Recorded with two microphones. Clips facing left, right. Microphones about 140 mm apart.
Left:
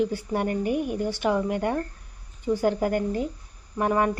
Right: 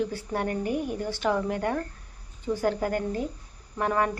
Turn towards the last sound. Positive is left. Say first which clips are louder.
# left 2 dB
turn(degrees=15)  # may be behind; listen again after turning